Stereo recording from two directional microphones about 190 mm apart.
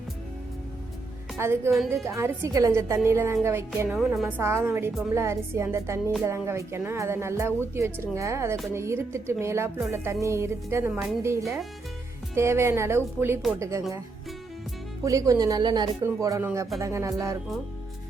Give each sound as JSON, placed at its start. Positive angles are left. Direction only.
{"t": 1.4, "sound": "speech", "side_deg": -15}
{"t": 15.0, "sound": "speech", "side_deg": -15}